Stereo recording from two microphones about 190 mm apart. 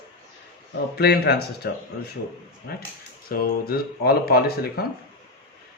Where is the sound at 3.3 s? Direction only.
50° left (ahead or behind).